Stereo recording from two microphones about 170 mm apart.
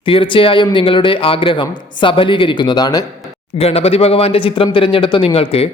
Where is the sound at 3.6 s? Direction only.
35° left (ahead or behind).